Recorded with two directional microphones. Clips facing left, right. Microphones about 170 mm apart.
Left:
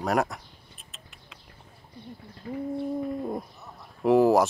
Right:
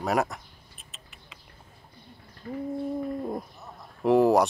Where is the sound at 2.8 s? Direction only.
Centre (ahead or behind).